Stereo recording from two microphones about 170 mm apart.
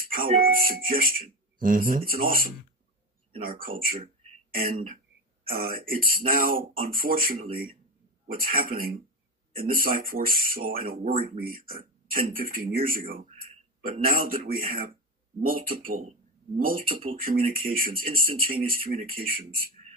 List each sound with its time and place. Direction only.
0.0 s speech: 55° right (ahead or behind)
5.5 s speech: 55° right (ahead or behind)